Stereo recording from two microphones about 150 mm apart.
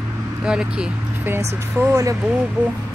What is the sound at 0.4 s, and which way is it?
Speech, 5° right (ahead or behind).